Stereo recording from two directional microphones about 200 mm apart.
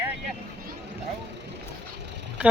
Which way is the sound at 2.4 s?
5° right (ahead or behind).